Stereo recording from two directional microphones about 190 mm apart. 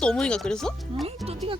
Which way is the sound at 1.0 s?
30° right (ahead or behind).